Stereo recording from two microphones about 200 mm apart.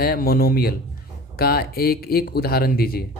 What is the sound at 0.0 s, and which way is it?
Speech, 50° left (ahead or behind).